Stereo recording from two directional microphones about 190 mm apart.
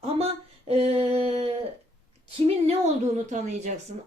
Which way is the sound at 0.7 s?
35° right (ahead or behind).